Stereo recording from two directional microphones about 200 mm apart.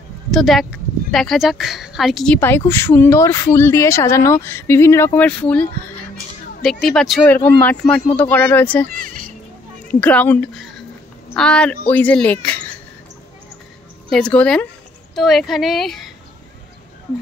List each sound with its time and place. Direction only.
0.3 s speech: centre (ahead or behind)
8.8 s speech: 45° right (ahead or behind)
9.8 s a woman's voice: 5° left (ahead or behind)
14.1 s speech: 5° left (ahead or behind)